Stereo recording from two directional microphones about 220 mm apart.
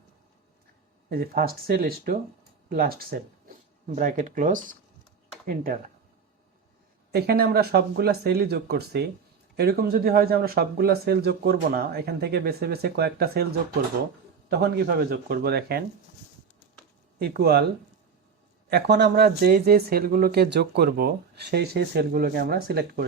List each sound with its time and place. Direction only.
1.1 s speech: 40° right (ahead or behind)
7.1 s speech: 45° right (ahead or behind)
14.6 s speech: 45° right (ahead or behind)
17.2 s speech: 45° right (ahead or behind)
18.7 s speech: 50° right (ahead or behind)